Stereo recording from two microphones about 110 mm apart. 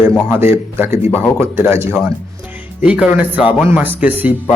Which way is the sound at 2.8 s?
10° right (ahead or behind).